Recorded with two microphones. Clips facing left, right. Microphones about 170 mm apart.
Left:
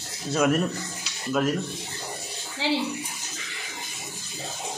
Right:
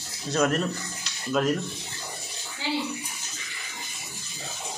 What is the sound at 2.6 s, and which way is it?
Bathtub, 90° left.